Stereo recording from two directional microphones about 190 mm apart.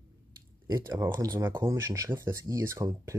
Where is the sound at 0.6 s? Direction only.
15° right (ahead or behind).